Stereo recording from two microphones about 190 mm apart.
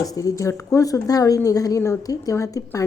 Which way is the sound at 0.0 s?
20° left (ahead or behind).